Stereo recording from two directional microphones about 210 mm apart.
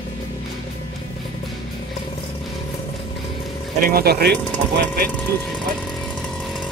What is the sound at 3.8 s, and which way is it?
Speech, 45° right (ahead or behind).